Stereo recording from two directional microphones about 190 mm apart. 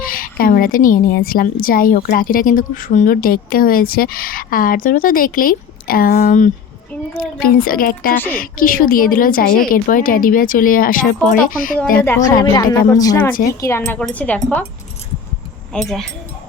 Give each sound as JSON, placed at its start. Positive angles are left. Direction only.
{"t": 0.0, "sound": "a woman's voice", "side_deg": 50}
{"t": 12.0, "sound": "speech", "side_deg": 15}
{"t": 15.7, "sound": "speech", "side_deg": 0}